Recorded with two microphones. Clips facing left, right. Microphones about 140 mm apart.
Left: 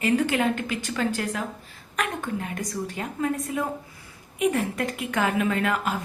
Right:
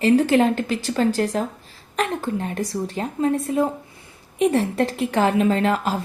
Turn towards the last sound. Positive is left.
turn(degrees=-35)  # may be behind; listen again after turning